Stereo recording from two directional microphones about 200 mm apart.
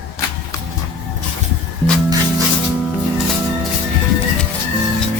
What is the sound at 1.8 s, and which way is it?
Music, 10° left (ahead or behind).